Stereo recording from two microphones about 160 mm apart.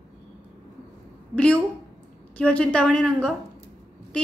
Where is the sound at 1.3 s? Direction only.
10° left (ahead or behind).